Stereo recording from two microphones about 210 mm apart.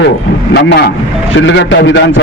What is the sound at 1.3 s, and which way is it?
Speech, 60° left (ahead or behind).